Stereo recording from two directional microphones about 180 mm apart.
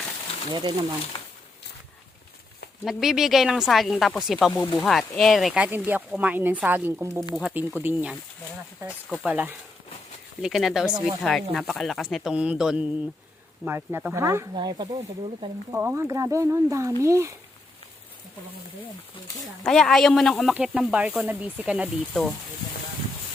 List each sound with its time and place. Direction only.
0.5 s speech: 25° right (ahead or behind)
1.1 s a sound: 25° left (ahead or behind)
2.8 s speech: centre (ahead or behind)
4.5 s speech: 20° left (ahead or behind)
4.8 s speech: centre (ahead or behind)
9.2 s speech: 10° right (ahead or behind); by 15.4 s 25° right (ahead or behind)
15.7 s speech: 15° right (ahead or behind)
19.6 s speech: 5° left (ahead or behind)
22.1 s speech: 5° left (ahead or behind)